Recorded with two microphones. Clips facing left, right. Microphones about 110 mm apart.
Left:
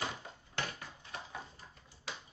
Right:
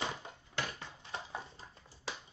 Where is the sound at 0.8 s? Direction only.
30° right (ahead or behind).